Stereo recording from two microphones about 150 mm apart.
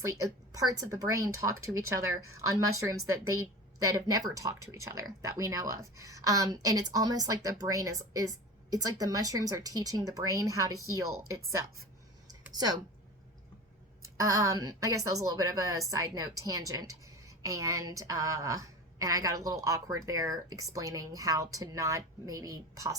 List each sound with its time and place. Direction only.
0.5 s speech: 25° right (ahead or behind)
14.2 s speech: 20° right (ahead or behind)